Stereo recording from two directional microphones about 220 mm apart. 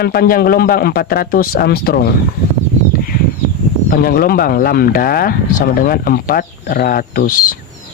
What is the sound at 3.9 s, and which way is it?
Speech, 45° left (ahead or behind).